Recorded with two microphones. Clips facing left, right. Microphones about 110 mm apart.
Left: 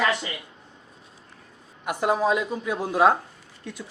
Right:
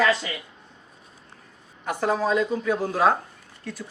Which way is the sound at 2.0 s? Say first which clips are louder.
Even; 15° left (ahead or behind).